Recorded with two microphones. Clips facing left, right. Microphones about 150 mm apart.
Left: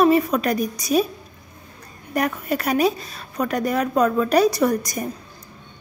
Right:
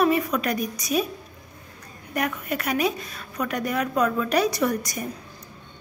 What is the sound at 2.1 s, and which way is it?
A woman's voice, 35° left (ahead or behind).